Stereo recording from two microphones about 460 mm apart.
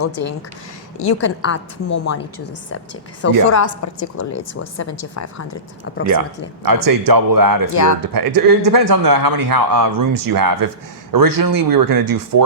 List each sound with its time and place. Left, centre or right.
0.0 s a woman's voice: left
3.5 s a woman's voice: left
6.1 s a man's voice: right